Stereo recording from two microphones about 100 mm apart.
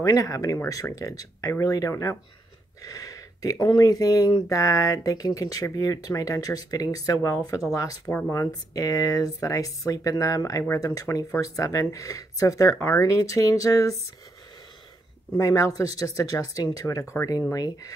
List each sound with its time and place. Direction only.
0.0 s speech: 35° left (ahead or behind)
2.8 s a sound: 35° left (ahead or behind)
3.6 s speech: 35° left (ahead or behind)
15.3 s speech: 30° left (ahead or behind)